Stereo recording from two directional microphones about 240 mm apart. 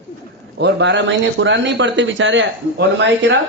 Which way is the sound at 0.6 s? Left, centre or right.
Right.